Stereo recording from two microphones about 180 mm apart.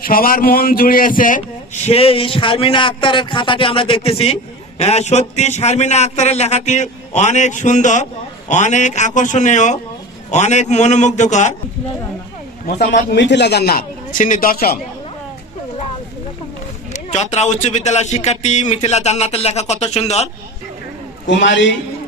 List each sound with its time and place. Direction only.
0.0 s a man's voice: 50° left (ahead or behind)
13.1 s a man's voice: 70° left (ahead or behind); by 14.8 s 55° left (ahead or behind)
16.9 s a man's voice: 40° left (ahead or behind)
21.3 s a man's voice: 85° left